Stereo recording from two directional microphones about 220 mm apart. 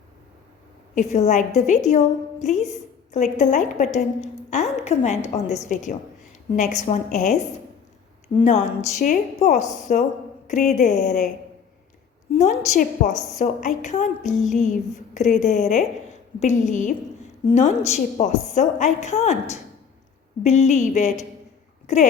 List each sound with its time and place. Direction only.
0.9 s a woman's voice: 30° left (ahead or behind)
8.4 s a woman's voice: 30° left (ahead or behind)
12.3 s a woman's voice: 30° left (ahead or behind)